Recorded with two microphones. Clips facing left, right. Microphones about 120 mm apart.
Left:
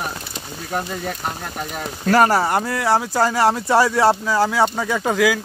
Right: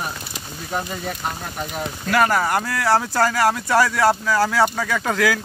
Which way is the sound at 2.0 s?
35° left (ahead or behind).